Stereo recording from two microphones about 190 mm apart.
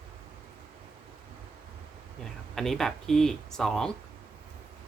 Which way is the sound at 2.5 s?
Centre (ahead or behind).